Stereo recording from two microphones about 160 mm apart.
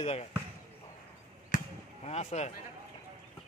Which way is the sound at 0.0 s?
40° left (ahead or behind).